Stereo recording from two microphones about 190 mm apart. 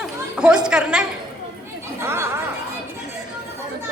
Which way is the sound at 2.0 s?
15° right (ahead or behind).